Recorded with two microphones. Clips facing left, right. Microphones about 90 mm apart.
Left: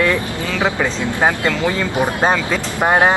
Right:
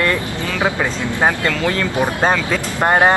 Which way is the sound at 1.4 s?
15° left (ahead or behind).